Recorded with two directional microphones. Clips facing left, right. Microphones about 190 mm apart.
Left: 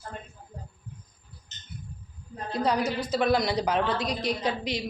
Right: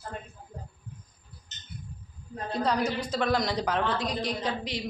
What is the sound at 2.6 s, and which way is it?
A woman's voice, 10° left (ahead or behind).